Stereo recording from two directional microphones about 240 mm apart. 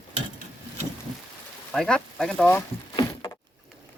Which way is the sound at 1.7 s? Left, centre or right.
Centre.